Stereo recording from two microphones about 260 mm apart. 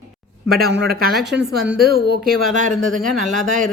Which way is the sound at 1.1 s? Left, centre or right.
Centre.